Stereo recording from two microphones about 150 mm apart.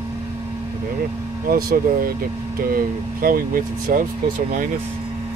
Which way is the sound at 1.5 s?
75° right (ahead or behind).